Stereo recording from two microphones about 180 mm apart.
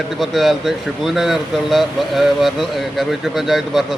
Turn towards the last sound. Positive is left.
turn(degrees=0)  # may be behind; listen again after turning